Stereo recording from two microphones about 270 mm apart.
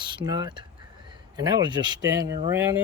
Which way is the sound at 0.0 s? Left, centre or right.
Centre.